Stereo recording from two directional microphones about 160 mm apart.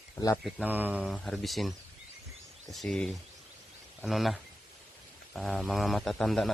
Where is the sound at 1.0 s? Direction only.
Centre (ahead or behind).